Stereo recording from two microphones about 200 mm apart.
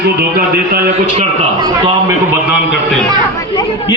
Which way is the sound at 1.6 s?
15° right (ahead or behind).